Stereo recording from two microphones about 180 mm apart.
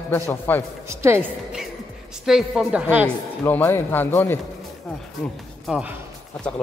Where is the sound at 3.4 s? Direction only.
10° left (ahead or behind).